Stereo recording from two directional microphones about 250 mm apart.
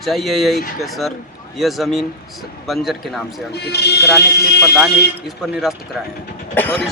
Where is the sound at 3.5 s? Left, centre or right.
Left.